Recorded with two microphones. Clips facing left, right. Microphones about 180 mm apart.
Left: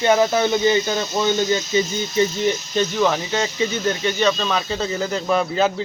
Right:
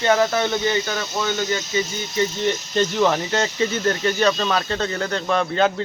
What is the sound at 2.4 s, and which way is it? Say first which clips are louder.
Speech: left 1 dB; centre (ahead or behind).